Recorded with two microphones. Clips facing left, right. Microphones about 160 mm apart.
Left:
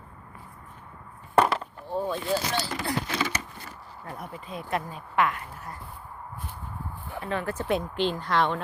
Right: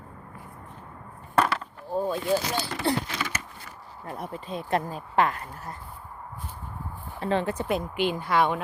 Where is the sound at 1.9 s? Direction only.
10° right (ahead or behind).